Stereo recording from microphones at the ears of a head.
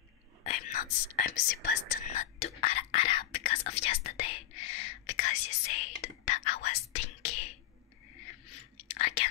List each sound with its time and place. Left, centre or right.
0.4 s whispering: left